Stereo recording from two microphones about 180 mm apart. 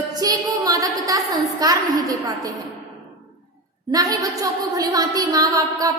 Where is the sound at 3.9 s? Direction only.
20° right (ahead or behind).